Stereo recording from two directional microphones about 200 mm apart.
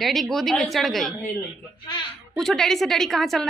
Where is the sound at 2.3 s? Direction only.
5° left (ahead or behind).